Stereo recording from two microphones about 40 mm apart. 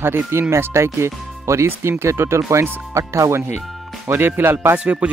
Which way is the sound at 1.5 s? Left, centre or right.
Right.